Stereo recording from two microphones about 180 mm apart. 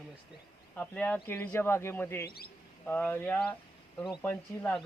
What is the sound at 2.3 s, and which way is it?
Speech, 60° left (ahead or behind).